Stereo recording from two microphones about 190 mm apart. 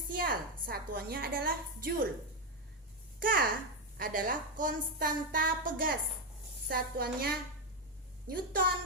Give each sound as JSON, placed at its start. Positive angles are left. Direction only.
{"t": 0.1, "sound": "a child's voice", "side_deg": -50}
{"t": 3.2, "sound": "a child's voice", "side_deg": -45}